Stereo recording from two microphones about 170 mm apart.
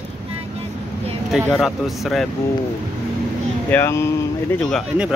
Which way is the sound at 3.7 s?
15° left (ahead or behind).